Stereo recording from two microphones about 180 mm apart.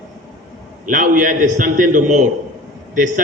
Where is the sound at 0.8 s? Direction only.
45° right (ahead or behind).